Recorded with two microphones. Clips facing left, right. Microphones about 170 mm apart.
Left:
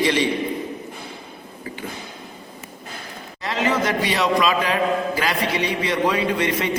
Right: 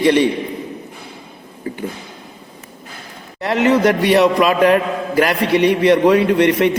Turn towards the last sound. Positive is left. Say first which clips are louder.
# right 8 dB
turn(degrees=-65)  # may be behind; listen again after turning